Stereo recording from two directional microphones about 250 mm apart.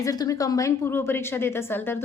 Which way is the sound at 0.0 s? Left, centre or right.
Centre.